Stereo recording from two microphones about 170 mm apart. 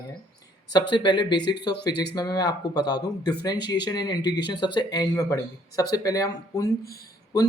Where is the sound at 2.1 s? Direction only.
25° left (ahead or behind).